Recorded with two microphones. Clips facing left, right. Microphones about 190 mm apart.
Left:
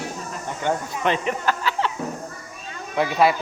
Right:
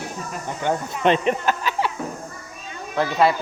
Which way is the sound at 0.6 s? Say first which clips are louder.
Right 3 dB; 20° right (ahead or behind).